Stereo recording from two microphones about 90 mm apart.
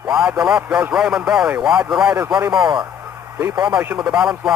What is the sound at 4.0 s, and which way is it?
Speech, 5° right (ahead or behind).